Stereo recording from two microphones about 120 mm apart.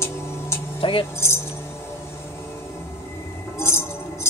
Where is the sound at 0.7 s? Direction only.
45° left (ahead or behind).